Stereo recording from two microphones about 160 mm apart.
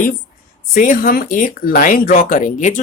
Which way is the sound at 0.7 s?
60° left (ahead or behind).